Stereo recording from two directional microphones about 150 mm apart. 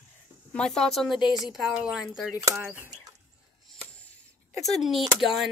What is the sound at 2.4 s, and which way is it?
Speech, 15° right (ahead or behind).